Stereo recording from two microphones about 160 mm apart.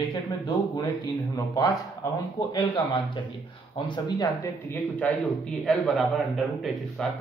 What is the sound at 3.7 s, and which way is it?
Speech, 30° left (ahead or behind).